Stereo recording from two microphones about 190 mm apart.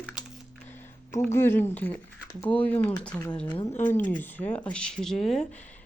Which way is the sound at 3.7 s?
40° left (ahead or behind).